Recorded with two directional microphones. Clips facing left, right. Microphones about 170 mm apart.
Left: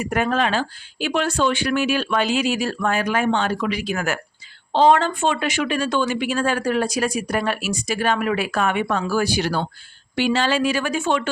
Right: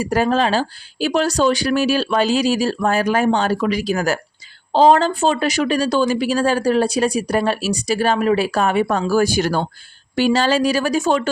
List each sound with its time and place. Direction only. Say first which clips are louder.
0.0 s speech: right 4 dB; 30° right (ahead or behind)